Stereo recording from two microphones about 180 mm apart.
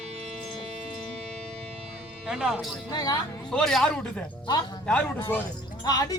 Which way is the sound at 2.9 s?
20° left (ahead or behind).